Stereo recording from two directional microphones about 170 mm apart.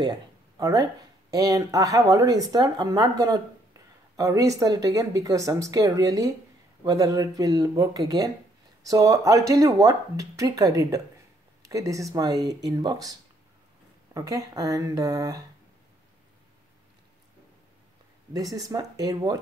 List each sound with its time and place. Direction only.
0.6 s speech: 20° right (ahead or behind)
14.1 s speech: 20° right (ahead or behind)
18.3 s speech: 20° right (ahead or behind)